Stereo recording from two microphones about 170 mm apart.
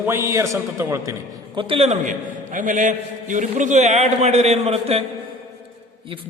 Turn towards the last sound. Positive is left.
turn(degrees=-30)  # may be behind; listen again after turning